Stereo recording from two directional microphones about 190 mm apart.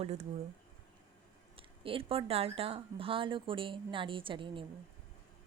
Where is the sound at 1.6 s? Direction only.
30° right (ahead or behind).